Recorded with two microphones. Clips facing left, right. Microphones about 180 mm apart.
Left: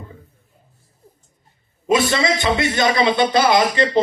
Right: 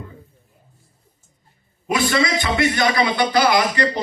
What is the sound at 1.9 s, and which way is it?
A man's voice, 25° left (ahead or behind).